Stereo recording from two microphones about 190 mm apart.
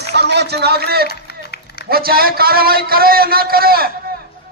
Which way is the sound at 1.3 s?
60° left (ahead or behind).